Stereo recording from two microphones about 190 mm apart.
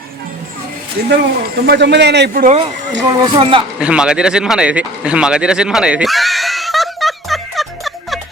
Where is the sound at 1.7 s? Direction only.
60° right (ahead or behind).